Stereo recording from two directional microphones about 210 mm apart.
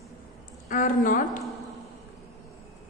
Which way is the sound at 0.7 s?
40° left (ahead or behind).